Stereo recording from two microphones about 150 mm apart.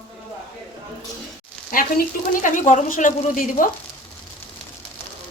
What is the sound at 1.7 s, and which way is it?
A woman's voice, 65° left (ahead or behind).